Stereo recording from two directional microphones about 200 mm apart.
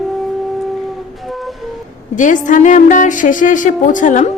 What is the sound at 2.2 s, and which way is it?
Speech, 40° left (ahead or behind).